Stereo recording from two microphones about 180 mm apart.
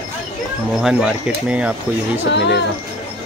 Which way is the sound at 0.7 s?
5° right (ahead or behind).